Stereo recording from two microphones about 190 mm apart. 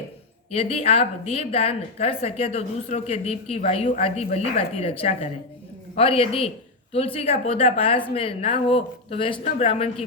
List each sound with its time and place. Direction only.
0.5 s a woman's voice: 30° left (ahead or behind)